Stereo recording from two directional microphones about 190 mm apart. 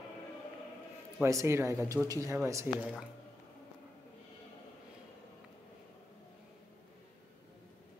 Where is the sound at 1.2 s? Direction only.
15° right (ahead or behind).